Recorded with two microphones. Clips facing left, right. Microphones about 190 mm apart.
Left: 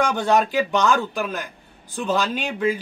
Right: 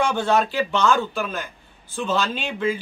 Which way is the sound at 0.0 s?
15° left (ahead or behind).